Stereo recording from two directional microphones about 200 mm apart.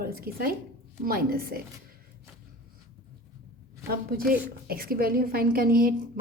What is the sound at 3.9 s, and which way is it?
A woman's voice, 50° right (ahead or behind).